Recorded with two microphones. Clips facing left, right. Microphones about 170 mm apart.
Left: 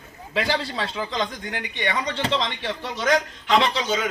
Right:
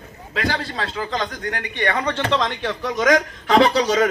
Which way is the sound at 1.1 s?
55° right (ahead or behind).